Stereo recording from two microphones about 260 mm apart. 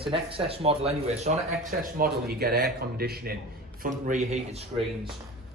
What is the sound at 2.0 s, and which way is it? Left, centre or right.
Speech, right.